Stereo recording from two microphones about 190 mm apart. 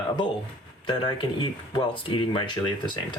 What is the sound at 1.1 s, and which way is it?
Speech, 25° left (ahead or behind).